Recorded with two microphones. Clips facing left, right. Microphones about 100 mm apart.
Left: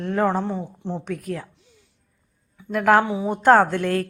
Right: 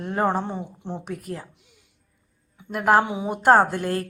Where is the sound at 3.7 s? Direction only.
55° left (ahead or behind).